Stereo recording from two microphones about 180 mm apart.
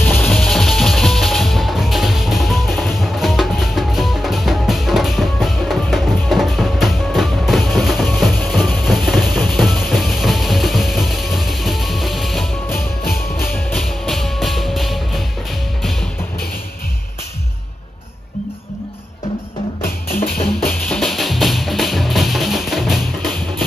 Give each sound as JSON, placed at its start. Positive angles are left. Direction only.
{"t": 0.0, "sound": "music", "side_deg": 0}
{"t": 13.4, "sound": "music", "side_deg": 10}
{"t": 13.7, "sound": "music", "side_deg": 0}
{"t": 19.8, "sound": "music", "side_deg": 10}